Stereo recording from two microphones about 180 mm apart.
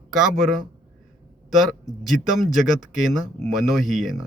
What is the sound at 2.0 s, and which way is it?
Speech, centre (ahead or behind).